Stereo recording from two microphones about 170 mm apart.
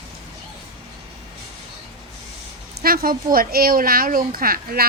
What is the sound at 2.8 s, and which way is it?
Speech, 60° right (ahead or behind).